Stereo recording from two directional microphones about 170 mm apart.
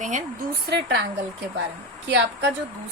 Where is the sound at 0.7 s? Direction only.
75° right (ahead or behind).